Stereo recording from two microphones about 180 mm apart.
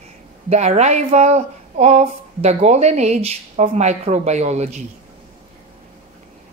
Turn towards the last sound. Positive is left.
turn(degrees=-40)  # may be behind; listen again after turning